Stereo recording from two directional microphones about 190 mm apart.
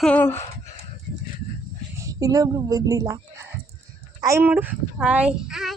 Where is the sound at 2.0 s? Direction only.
15° right (ahead or behind).